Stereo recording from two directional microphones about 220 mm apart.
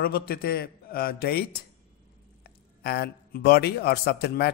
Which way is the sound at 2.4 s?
45° left (ahead or behind).